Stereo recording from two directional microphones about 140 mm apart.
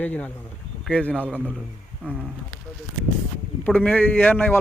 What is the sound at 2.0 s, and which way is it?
Speech, 10° right (ahead or behind).